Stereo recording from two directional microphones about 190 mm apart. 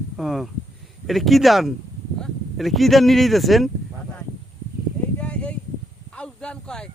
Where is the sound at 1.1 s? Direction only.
Centre (ahead or behind).